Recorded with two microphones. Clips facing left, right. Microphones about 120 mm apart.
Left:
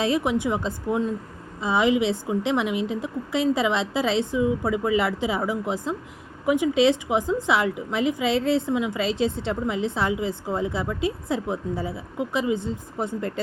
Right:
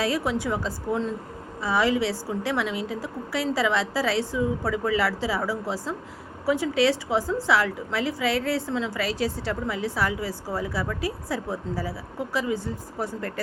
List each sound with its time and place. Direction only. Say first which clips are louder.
0.0 s a woman's voice: left 3 dB; 20° left (ahead or behind)